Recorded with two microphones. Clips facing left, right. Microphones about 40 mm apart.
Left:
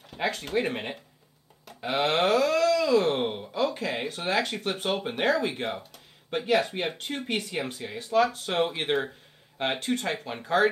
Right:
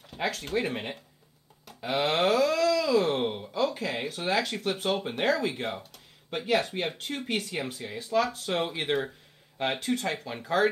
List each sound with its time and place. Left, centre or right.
0.0 s speech: centre
1.8 s wail: centre
8.0 s speech: centre
8.5 s wail: centre
9.8 s speech: left